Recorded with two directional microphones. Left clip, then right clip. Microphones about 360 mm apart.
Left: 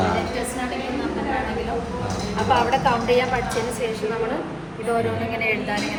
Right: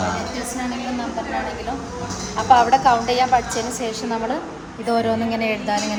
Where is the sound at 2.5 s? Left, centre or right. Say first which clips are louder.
Right 6 dB; right.